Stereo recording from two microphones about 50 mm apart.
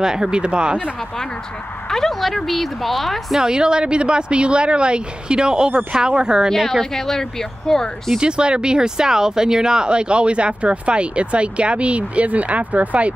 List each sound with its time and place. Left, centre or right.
0.0 s speech: centre
1.9 s a woman's voice: centre
3.3 s speech: centre
6.5 s speech: centre
8.2 s speech: centre